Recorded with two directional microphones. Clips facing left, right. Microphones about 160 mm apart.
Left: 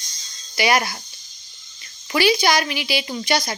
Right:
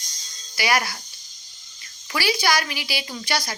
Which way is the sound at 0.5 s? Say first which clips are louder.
Left 4 dB; 20° left (ahead or behind).